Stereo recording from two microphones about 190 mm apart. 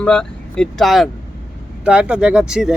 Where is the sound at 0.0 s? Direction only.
5° left (ahead or behind).